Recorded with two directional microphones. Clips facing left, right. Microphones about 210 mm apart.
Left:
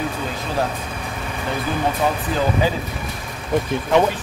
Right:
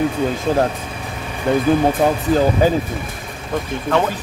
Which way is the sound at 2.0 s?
50° right (ahead or behind).